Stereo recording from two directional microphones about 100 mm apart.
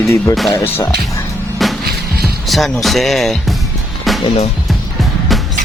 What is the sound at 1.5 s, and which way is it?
Music, centre (ahead or behind).